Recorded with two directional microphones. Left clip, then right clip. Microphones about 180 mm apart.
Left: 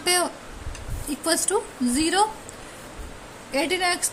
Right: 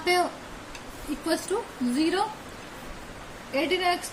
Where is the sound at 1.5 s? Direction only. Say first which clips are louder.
Left 4 dB; 55° left (ahead or behind).